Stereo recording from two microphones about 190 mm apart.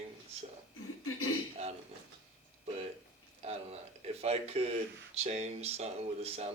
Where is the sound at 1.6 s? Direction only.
35° right (ahead or behind).